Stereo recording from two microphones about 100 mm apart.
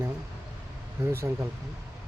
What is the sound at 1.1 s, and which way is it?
Speech, 25° right (ahead or behind).